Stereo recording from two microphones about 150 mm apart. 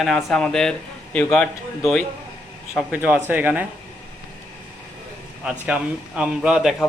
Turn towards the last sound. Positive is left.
turn(degrees=0)  # may be behind; listen again after turning